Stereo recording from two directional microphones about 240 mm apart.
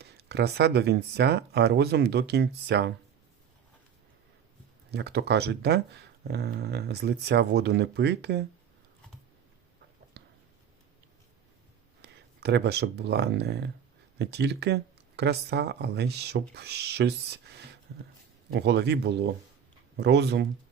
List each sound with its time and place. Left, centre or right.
0.0 s speech: right
4.9 s speech: right
12.0 s speech: right